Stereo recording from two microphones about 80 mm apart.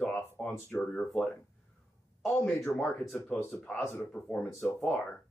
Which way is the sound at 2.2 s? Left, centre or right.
Centre.